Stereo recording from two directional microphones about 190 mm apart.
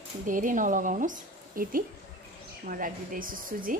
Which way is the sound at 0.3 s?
45° right (ahead or behind).